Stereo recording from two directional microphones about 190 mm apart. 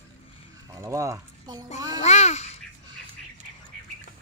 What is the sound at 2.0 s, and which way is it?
Babbling, 35° left (ahead or behind).